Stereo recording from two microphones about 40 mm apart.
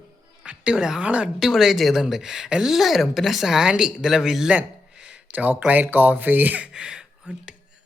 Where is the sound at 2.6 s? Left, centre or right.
Centre.